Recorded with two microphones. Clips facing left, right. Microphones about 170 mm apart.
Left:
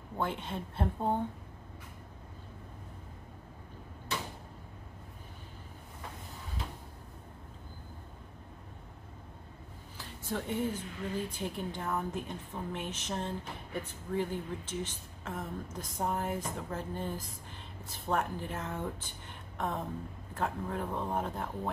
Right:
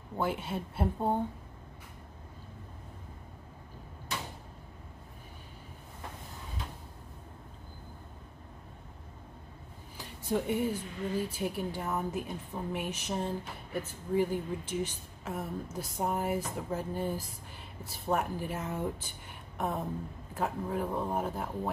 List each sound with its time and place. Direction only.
0.2 s speech: 5° right (ahead or behind)
9.9 s speech: 15° right (ahead or behind)
19.5 s a sound: 10° right (ahead or behind)
20.3 s speech: 10° right (ahead or behind)